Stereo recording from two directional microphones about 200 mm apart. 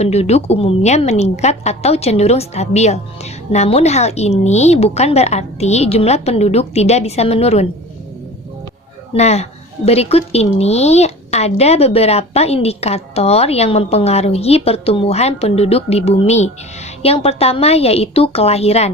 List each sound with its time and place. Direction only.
0.0 s speech: 30° left (ahead or behind)
9.1 s speech: 30° left (ahead or behind)